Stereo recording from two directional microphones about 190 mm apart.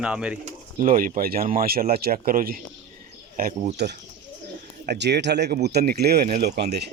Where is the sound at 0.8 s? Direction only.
45° right (ahead or behind).